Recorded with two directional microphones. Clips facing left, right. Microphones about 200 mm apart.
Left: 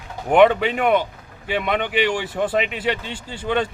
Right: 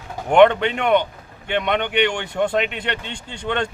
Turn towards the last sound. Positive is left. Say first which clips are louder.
# left 2 dB
turn(degrees=5)  # may be behind; listen again after turning